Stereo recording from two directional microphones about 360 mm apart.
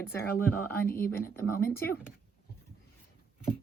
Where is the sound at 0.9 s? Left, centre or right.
Centre.